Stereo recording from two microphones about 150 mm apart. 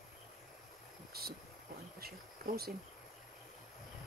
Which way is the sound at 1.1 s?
90° right.